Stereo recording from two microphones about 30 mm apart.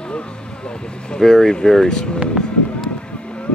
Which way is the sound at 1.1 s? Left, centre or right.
Centre.